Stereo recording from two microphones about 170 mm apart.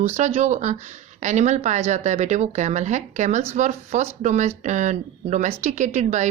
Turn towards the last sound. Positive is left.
turn(degrees=-45)  # may be behind; listen again after turning